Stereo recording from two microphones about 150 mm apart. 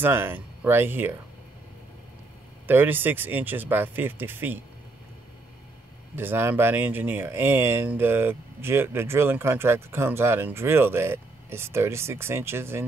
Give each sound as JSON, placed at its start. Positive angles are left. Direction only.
{"t": 0.0, "sound": "speech", "side_deg": -15}
{"t": 2.6, "sound": "speech", "side_deg": -15}
{"t": 6.1, "sound": "speech", "side_deg": -15}